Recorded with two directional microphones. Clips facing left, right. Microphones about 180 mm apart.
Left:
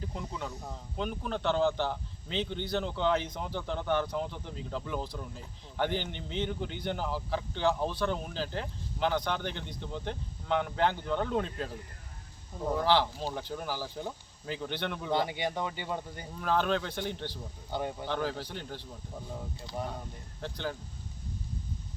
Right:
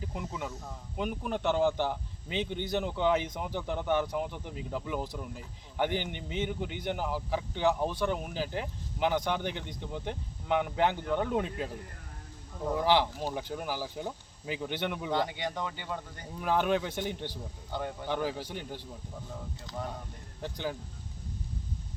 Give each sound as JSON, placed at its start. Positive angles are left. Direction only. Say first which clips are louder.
{"t": 0.0, "sound": "speech", "louder": "right 1 dB", "side_deg": -5}
{"t": 12.7, "sound": "speech", "louder": "right 1 dB", "side_deg": -15}
{"t": 15.1, "sound": "speech", "louder": "left 4 dB", "side_deg": 15}
{"t": 16.4, "sound": "speech", "louder": "right 1 dB", "side_deg": -15}
{"t": 17.7, "sound": "speech", "louder": "left 2 dB", "side_deg": 15}
{"t": 18.0, "sound": "speech", "louder": "right 1 dB", "side_deg": -10}
{"t": 20.4, "sound": "speech", "louder": "right 1 dB", "side_deg": -10}